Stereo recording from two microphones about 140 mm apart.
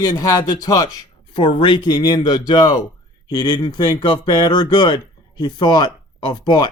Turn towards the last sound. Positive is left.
turn(degrees=30)  # may be behind; listen again after turning